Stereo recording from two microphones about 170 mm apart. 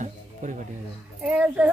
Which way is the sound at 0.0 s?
50° right (ahead or behind).